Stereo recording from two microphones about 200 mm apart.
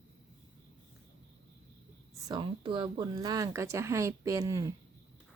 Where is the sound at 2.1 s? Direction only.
20° right (ahead or behind).